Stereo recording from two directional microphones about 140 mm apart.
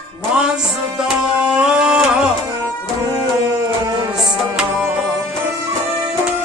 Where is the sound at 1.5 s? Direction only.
5° right (ahead or behind).